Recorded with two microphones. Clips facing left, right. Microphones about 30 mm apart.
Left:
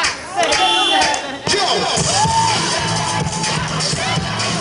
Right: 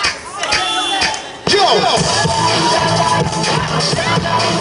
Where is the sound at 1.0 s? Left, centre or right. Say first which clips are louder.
Even; right.